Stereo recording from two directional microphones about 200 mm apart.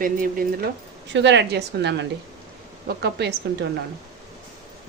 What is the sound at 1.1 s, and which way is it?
A woman's voice, 60° right (ahead or behind).